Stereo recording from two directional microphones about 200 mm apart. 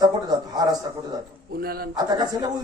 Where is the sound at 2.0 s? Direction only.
20° right (ahead or behind).